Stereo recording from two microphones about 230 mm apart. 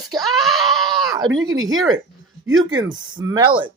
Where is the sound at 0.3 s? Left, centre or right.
Centre.